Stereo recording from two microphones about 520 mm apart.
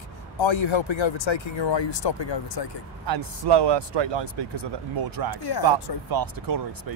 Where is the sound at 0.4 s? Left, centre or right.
Left.